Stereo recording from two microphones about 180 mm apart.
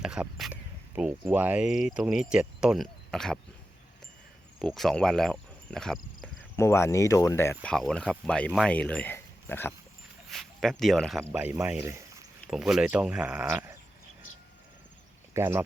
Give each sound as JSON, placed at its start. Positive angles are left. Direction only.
{"t": 0.0, "sound": "speech", "side_deg": -5}
{"t": 4.6, "sound": "speech", "side_deg": 0}
{"t": 6.6, "sound": "speech", "side_deg": 15}
{"t": 7.6, "sound": "speech", "side_deg": 5}
{"t": 10.3, "sound": "speech", "side_deg": 0}
{"t": 11.2, "sound": "speech", "side_deg": -10}
{"t": 12.5, "sound": "speech", "side_deg": -5}
{"t": 15.3, "sound": "speech", "side_deg": -15}